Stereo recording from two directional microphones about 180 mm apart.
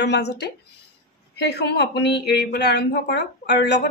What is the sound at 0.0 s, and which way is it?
Speech, 70° left (ahead or behind).